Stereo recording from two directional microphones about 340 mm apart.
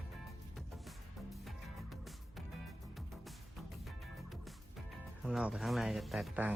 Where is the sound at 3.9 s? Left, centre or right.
Centre.